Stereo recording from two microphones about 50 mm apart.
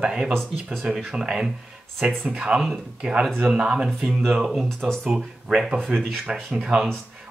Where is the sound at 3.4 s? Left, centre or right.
Right.